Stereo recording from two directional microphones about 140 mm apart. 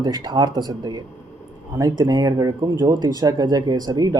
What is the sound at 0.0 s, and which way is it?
Speech, 30° right (ahead or behind).